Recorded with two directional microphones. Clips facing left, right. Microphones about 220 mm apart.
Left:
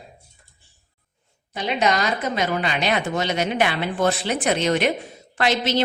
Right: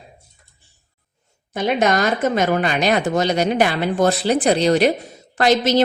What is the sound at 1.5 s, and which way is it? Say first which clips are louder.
A woman's voice: right 4 dB; 50° right (ahead or behind).